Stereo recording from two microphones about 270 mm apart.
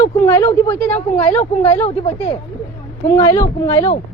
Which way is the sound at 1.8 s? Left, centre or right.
Left.